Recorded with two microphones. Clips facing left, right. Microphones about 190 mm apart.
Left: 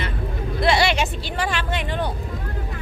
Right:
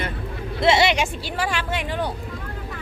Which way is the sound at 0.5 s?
25° right (ahead or behind).